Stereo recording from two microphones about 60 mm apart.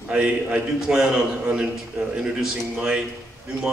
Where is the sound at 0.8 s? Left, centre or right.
Centre.